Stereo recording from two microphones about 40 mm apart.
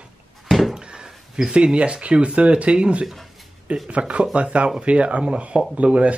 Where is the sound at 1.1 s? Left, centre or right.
Centre.